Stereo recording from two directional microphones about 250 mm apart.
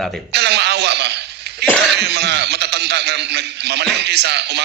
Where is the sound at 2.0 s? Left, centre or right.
Right.